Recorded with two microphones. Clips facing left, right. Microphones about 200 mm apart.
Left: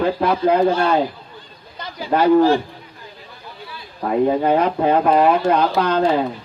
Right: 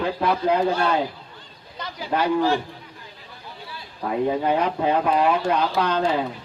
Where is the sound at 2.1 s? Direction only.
40° left (ahead or behind).